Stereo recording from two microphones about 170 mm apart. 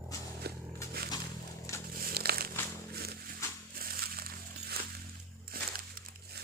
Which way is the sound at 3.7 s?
60° right (ahead or behind).